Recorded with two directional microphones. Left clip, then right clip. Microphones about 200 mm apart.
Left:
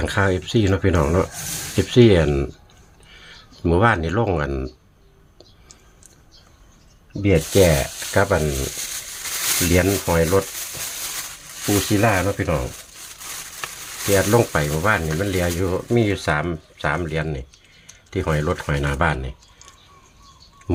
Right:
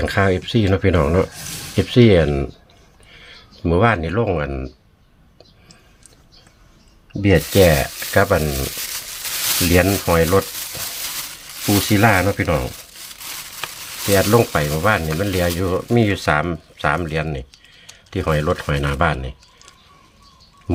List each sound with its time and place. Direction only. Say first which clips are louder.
0.0 s speech: right 3 dB; 15° right (ahead or behind); by 4.7 s centre (ahead or behind)
7.2 s speech: right 2 dB; 20° right (ahead or behind)
9.7 s speech: right 3 dB; 20° right (ahead or behind)
11.6 s speech: right 3 dB; 25° right (ahead or behind); by 19.6 s 10° right (ahead or behind)
20.7 s speech: right 2 dB; 10° right (ahead or behind)